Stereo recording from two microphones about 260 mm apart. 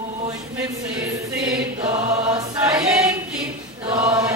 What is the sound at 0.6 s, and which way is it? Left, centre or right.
Music, centre.